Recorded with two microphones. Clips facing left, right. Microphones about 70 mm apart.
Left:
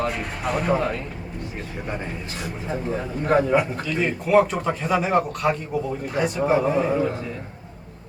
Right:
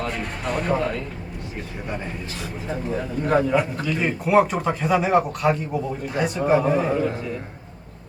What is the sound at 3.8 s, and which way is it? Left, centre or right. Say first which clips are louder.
Speech: right 1 dB; centre.